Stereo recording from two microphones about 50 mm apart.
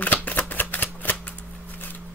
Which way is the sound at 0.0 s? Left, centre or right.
Left.